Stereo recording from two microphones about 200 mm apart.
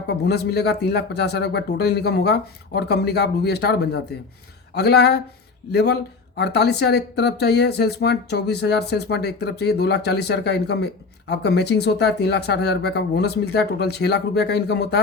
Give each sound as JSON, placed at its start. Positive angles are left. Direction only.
{"t": 0.1, "sound": "speech", "side_deg": 55}